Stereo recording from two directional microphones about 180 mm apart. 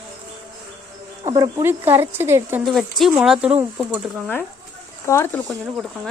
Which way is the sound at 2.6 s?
Centre (ahead or behind).